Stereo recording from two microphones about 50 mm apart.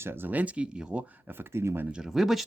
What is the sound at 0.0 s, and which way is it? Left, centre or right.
Speech, right.